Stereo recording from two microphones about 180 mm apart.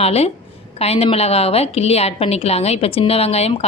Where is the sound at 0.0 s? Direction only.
35° left (ahead or behind).